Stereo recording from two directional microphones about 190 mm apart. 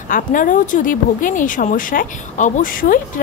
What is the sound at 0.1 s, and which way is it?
A woman's voice, 45° left (ahead or behind).